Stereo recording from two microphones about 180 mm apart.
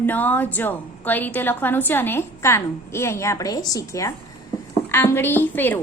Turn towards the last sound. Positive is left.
turn(degrees=10)  # may be behind; listen again after turning